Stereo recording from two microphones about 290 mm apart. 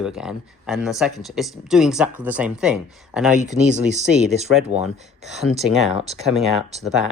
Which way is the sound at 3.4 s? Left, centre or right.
Right.